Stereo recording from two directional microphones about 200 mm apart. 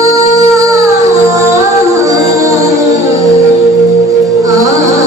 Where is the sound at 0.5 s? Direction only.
15° right (ahead or behind).